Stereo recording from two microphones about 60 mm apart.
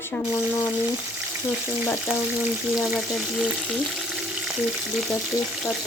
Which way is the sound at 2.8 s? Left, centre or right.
Centre.